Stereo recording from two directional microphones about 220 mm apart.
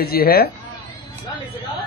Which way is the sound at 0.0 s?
45° left (ahead or behind).